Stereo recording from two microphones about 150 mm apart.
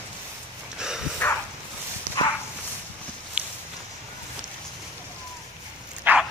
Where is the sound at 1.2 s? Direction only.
10° left (ahead or behind).